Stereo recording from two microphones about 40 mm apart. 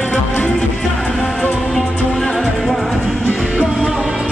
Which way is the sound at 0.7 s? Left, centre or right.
Centre.